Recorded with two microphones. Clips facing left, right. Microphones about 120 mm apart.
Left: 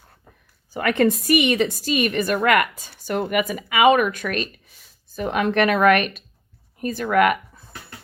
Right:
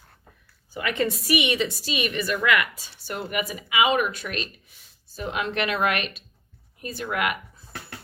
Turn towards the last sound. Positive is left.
turn(degrees=45)  # may be behind; listen again after turning